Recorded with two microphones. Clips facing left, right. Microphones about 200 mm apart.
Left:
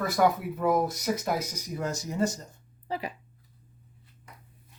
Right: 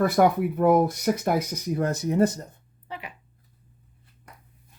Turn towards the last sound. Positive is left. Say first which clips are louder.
# left 5 dB
turn(degrees=35)  # may be behind; listen again after turning